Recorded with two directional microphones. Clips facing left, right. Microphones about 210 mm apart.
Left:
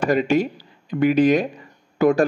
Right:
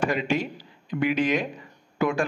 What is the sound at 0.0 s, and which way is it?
A man's voice, 40° left (ahead or behind).